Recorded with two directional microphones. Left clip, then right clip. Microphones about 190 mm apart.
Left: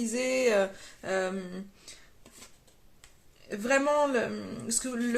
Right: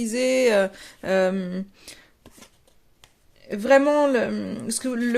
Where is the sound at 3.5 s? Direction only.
50° right (ahead or behind).